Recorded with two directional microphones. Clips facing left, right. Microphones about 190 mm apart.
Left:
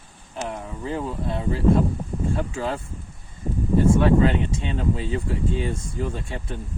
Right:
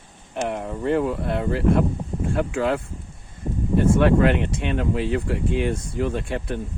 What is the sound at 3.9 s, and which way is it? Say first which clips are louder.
Speech: right 1 dB; 65° right (ahead or behind).